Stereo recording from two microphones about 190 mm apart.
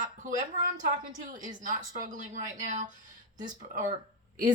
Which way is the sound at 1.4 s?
45° right (ahead or behind).